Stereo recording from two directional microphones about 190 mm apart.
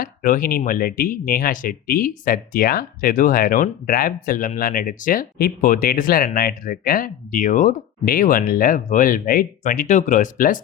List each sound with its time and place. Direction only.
0.0 s speech: 50° left (ahead or behind)
7.4 s speech: 40° left (ahead or behind)